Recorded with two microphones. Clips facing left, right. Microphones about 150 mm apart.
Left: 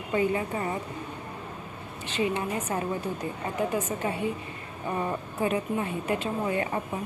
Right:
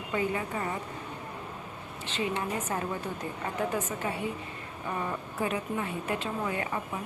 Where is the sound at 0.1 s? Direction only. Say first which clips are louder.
Left 4 dB; 25° left (ahead or behind).